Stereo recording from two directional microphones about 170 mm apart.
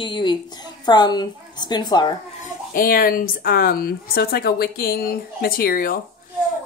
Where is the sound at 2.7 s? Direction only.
55° left (ahead or behind).